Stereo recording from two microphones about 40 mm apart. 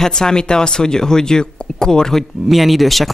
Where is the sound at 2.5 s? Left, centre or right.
Centre.